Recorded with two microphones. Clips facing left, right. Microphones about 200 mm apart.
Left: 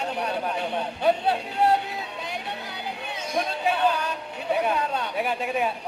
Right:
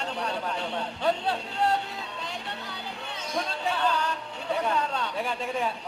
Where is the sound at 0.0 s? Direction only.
15° left (ahead or behind).